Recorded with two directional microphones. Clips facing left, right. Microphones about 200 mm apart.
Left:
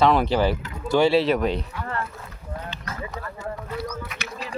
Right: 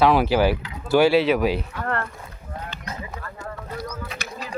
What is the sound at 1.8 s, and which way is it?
Speech, 60° right (ahead or behind).